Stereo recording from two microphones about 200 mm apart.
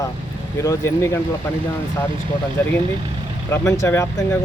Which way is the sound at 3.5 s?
15° left (ahead or behind).